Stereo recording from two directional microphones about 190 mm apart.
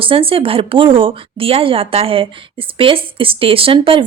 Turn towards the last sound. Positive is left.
turn(degrees=-30)  # may be behind; listen again after turning